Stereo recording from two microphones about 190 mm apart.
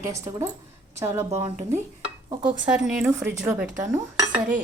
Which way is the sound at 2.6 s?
5° right (ahead or behind).